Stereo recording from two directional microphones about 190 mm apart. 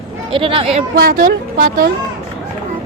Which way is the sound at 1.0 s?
50° right (ahead or behind).